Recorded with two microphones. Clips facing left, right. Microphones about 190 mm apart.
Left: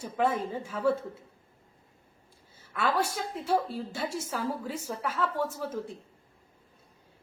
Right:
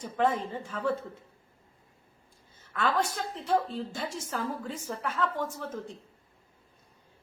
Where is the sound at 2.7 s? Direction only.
10° left (ahead or behind).